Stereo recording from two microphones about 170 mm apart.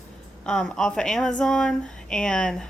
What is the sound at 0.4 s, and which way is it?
A woman's voice, 5° left (ahead or behind).